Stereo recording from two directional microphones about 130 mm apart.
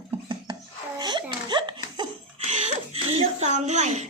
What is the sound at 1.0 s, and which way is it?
Giggle, 35° right (ahead or behind).